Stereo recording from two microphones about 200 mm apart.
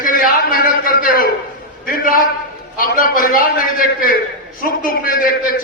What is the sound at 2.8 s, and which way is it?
Speech, 45° left (ahead or behind).